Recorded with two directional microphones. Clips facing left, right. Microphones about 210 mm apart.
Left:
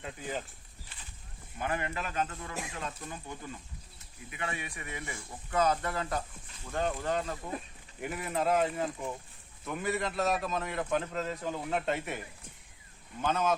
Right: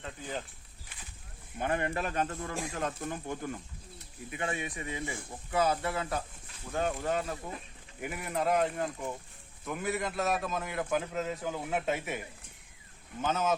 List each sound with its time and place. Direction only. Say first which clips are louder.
0.0 s a sound: left 1 dB; 10° left (ahead or behind)
1.5 s speech: right 2 dB; 30° right (ahead or behind)
1.8 s speech: right 3 dB; 45° right (ahead or behind)
3.9 s speech: right 6 dB; 35° right (ahead or behind)
5.5 s a man's voice: even; 10° right (ahead or behind)
13.2 s a man's voice: even; 5° right (ahead or behind)